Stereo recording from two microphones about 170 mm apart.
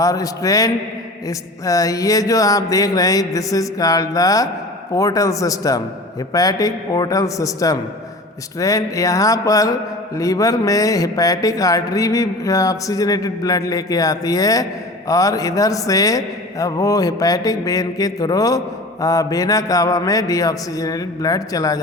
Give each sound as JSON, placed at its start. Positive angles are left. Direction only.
{"t": 0.0, "sound": "speech", "side_deg": 20}